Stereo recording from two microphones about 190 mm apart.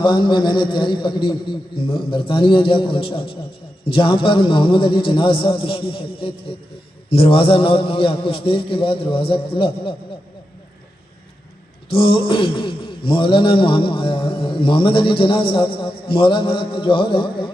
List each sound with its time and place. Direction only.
0.0 s speech: 25° left (ahead or behind)
11.9 s speech: 30° left (ahead or behind)